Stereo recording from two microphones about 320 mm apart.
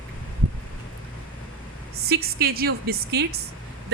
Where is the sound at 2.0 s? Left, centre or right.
Right.